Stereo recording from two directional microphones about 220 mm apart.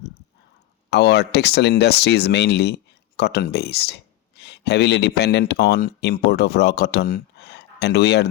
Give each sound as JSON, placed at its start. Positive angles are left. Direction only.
{"t": 0.9, "sound": "speech", "side_deg": 50}